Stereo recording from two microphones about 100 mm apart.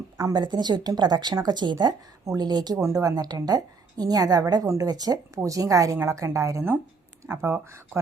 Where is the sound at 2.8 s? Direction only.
30° right (ahead or behind).